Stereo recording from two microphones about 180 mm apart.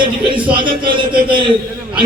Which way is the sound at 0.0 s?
25° right (ahead or behind).